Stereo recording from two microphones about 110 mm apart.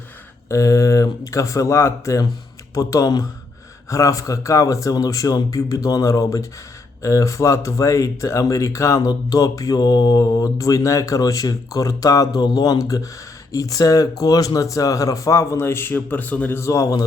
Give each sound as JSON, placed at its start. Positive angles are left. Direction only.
{"t": 0.4, "sound": "a man's voice", "side_deg": 30}